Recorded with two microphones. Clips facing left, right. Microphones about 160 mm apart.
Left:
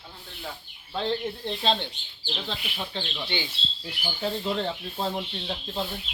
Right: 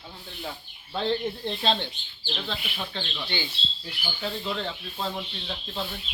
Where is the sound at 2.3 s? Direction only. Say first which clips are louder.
Even; 10° left (ahead or behind); by 5.1 s 30° left (ahead or behind).